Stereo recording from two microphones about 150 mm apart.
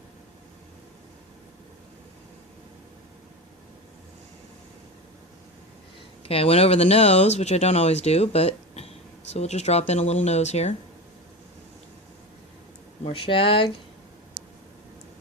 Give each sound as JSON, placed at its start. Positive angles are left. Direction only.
{"t": 6.2, "sound": "speech", "side_deg": 40}
{"t": 13.1, "sound": "speech", "side_deg": 35}